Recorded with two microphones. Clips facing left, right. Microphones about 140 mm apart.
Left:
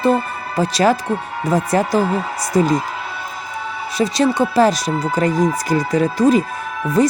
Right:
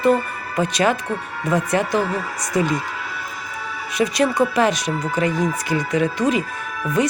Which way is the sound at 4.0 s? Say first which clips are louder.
Left 2 dB; 35° left (ahead or behind).